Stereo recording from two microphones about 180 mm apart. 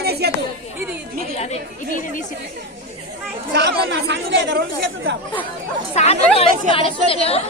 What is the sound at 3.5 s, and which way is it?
Speech, 75° right (ahead or behind).